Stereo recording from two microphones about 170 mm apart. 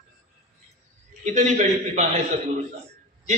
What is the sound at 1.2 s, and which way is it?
Speech, 45° right (ahead or behind).